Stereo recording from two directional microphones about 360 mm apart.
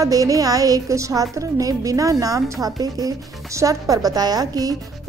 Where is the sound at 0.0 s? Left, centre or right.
Centre.